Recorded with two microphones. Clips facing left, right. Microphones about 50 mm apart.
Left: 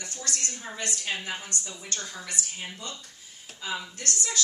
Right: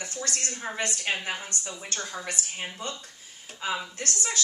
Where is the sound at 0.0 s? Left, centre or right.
Right.